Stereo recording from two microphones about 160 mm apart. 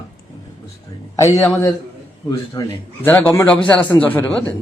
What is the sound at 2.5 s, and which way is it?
A man's voice, 15° left (ahead or behind).